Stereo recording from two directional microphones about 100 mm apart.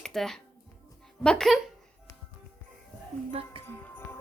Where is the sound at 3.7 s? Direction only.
20° left (ahead or behind).